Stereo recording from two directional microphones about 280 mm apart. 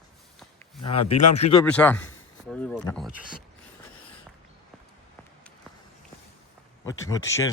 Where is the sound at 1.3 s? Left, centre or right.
Left.